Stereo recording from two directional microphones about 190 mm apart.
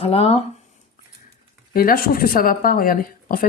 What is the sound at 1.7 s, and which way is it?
Speech, 50° left (ahead or behind).